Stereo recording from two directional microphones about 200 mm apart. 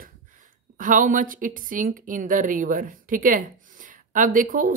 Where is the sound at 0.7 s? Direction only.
40° right (ahead or behind).